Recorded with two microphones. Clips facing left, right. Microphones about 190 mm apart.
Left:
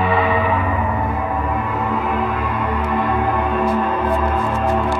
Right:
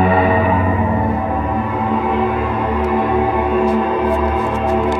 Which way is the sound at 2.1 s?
25° right (ahead or behind).